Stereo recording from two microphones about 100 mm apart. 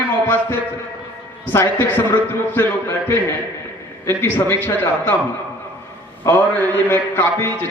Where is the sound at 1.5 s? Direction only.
20° left (ahead or behind).